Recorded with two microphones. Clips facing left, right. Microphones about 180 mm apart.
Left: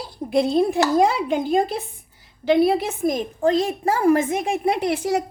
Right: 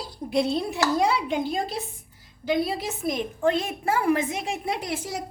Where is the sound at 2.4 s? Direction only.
65° left (ahead or behind).